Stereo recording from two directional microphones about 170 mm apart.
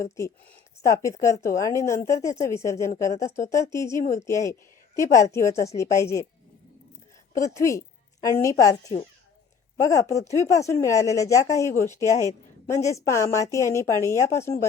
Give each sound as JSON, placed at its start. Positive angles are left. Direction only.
{"t": 0.0, "sound": "speech", "side_deg": 15}
{"t": 7.3, "sound": "a woman's voice", "side_deg": 20}